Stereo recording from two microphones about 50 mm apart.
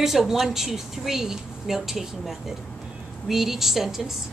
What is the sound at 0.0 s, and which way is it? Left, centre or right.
A woman's voice, centre.